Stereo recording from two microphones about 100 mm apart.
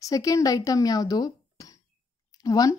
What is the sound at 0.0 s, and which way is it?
A woman's voice, 35° left (ahead or behind).